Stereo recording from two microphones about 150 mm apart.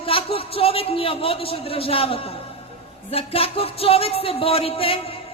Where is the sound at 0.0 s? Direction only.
40° left (ahead or behind).